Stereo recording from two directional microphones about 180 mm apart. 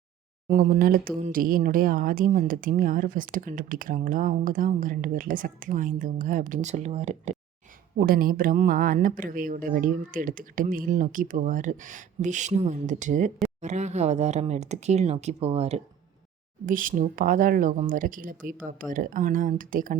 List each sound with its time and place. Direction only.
0.4 s speech: 45° right (ahead or behind)
7.9 s speech: 55° right (ahead or behind); by 15.8 s 35° right (ahead or behind)
16.6 s speech: 50° right (ahead or behind)